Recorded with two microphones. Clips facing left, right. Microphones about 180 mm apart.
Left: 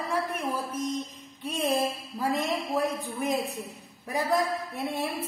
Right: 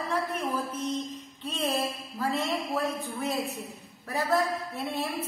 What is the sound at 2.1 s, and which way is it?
A woman's voice, 15° left (ahead or behind).